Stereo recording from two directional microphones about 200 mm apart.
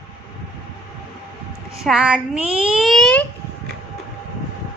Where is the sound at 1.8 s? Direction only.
5° right (ahead or behind).